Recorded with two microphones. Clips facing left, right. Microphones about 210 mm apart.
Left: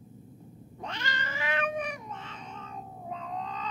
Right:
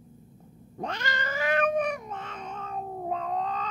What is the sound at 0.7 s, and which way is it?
Cat, 45° right (ahead or behind).